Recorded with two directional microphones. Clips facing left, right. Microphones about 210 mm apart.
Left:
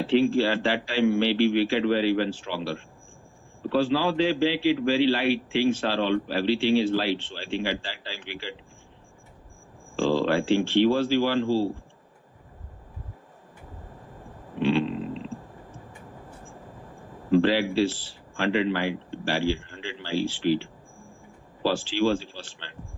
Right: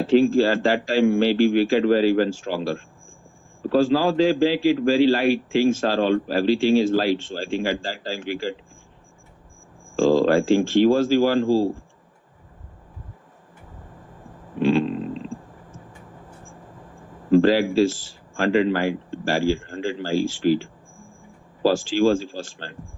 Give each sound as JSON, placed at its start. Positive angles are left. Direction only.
{"t": 0.0, "sound": "a man's voice", "side_deg": -45}
{"t": 9.9, "sound": "a man's voice", "side_deg": -45}
{"t": 14.6, "sound": "a sound", "side_deg": -45}
{"t": 17.3, "sound": "a man's voice", "side_deg": -45}